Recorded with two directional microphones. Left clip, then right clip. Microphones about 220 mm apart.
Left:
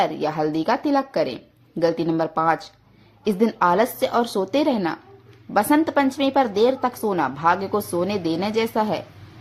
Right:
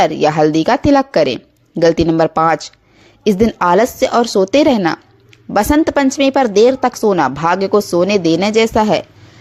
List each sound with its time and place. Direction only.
0.0 s a woman's voice: 35° right (ahead or behind)